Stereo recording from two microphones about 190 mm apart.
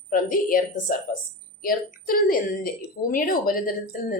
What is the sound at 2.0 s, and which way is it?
Speech, 50° left (ahead or behind).